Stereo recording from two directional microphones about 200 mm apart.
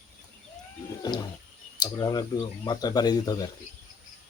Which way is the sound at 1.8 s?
20° left (ahead or behind).